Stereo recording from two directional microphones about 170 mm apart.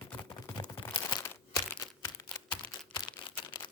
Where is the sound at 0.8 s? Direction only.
30° left (ahead or behind).